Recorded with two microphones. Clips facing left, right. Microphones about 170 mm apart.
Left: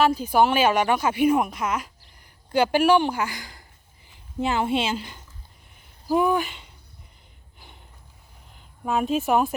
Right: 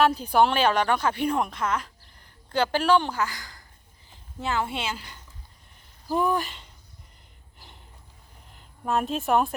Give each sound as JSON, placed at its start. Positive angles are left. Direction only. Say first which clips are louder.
{"t": 0.0, "sound": "a woman's voice", "louder": "left 1 dB", "side_deg": 0}
{"t": 6.1, "sound": "speech", "louder": "left 4 dB", "side_deg": 5}
{"t": 8.5, "sound": "a woman's voice", "louder": "left 1 dB", "side_deg": 0}